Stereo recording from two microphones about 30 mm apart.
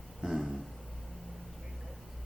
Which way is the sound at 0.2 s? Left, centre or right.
Right.